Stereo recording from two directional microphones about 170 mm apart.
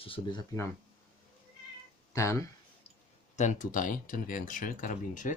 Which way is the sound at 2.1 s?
15° left (ahead or behind).